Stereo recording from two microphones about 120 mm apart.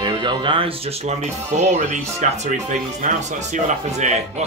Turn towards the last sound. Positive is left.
turn(degrees=-70)  # may be behind; listen again after turning